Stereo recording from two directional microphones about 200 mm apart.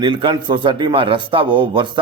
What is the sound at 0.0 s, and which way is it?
A man's voice, 25° right (ahead or behind).